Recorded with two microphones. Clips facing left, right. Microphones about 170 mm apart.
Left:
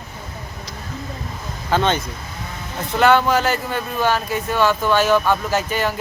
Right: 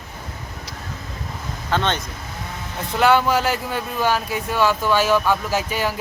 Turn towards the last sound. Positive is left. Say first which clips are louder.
# left 2 dB
turn(degrees=-5)  # may be behind; listen again after turning